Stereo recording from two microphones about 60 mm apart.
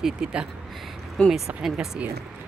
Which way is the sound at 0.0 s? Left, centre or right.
Centre.